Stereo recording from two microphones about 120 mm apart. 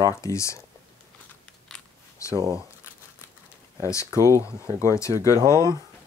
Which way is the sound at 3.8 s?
25° left (ahead or behind).